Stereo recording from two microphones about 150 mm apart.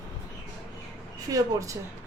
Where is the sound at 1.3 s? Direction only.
20° right (ahead or behind).